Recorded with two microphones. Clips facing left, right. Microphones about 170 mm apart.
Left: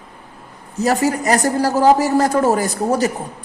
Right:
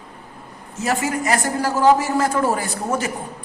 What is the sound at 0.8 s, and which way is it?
A man's voice, 35° left (ahead or behind).